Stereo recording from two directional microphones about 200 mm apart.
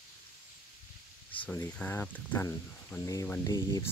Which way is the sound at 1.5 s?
10° left (ahead or behind).